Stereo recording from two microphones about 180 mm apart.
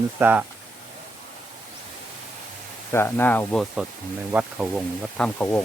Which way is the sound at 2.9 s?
10° left (ahead or behind).